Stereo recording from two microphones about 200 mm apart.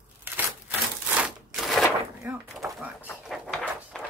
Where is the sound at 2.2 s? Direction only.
5° right (ahead or behind).